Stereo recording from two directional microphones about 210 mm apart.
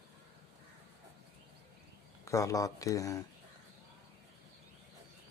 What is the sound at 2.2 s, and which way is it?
Speech, 15° left (ahead or behind).